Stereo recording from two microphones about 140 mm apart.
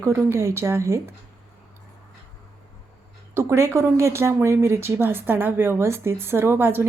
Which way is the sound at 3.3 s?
20° right (ahead or behind).